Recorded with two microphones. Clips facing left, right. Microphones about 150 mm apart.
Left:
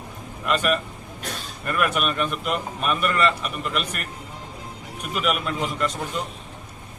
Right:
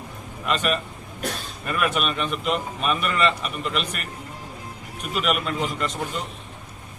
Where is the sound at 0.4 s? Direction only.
Centre (ahead or behind).